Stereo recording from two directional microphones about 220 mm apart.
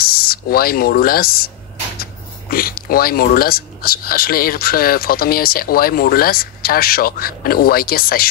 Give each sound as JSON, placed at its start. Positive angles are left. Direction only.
{"t": 0.0, "sound": "speech", "side_deg": 45}
{"t": 2.5, "sound": "speech", "side_deg": 40}